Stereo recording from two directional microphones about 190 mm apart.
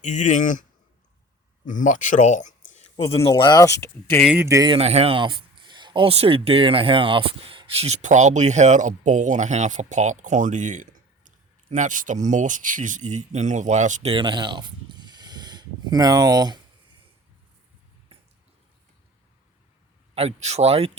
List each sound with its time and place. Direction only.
0.0 s speech: 40° left (ahead or behind)
1.6 s speech: 40° left (ahead or behind); by 4.2 s 10° left (ahead or behind)
4.2 s speech: 10° right (ahead or behind)
4.8 s speech: 35° right (ahead or behind)
20.1 s speech: 35° right (ahead or behind)